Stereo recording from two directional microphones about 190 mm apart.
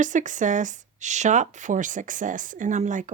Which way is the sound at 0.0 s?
40° right (ahead or behind).